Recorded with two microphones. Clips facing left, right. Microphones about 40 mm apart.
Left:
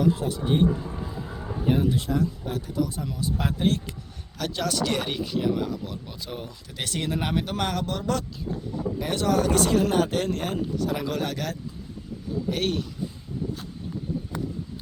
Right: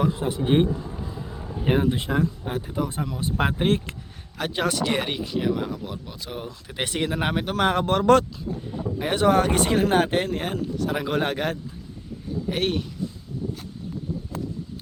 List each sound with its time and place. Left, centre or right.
0.2 s speech: right
0.8 s music: centre
1.6 s speech: right
4.7 s speech: centre
7.9 s speech: right
9.0 s speech: right
9.9 s speech: right
10.2 s speech: centre
12.5 s speech: centre